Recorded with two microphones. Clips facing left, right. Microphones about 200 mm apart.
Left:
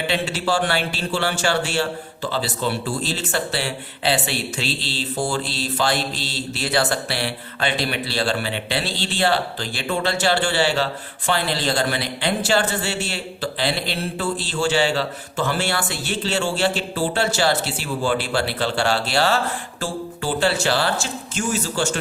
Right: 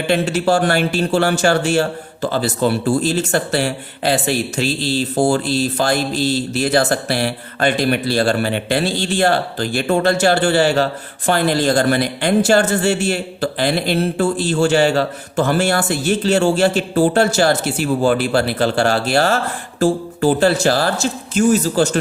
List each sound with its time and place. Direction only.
0.1 s a man's voice: 50° right (ahead or behind)